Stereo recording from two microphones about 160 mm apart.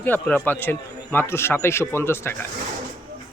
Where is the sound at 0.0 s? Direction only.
10° left (ahead or behind).